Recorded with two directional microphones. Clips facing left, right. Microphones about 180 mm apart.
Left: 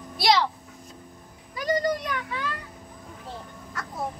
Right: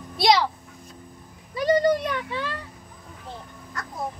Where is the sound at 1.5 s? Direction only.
25° right (ahead or behind).